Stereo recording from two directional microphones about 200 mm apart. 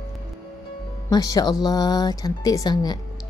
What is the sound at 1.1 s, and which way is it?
Speech, 20° left (ahead or behind).